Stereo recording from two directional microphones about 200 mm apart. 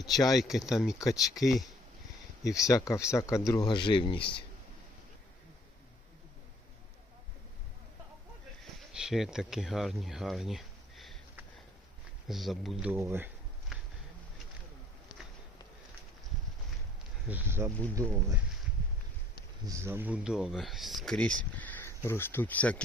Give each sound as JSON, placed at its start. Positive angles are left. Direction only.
{"t": 0.3, "sound": "speech", "side_deg": 0}
{"t": 2.6, "sound": "speech", "side_deg": 15}
{"t": 8.9, "sound": "speech", "side_deg": 0}
{"t": 17.2, "sound": "speech", "side_deg": -10}
{"t": 17.7, "sound": "speech", "side_deg": 5}
{"t": 17.9, "sound": "speech", "side_deg": -15}
{"t": 19.6, "sound": "speech", "side_deg": -15}